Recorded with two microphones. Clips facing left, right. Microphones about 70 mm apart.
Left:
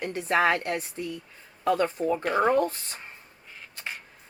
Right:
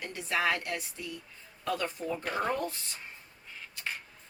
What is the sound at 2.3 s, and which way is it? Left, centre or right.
Speech, centre.